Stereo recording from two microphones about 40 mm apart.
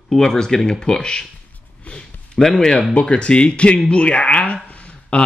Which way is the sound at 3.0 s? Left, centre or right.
Left.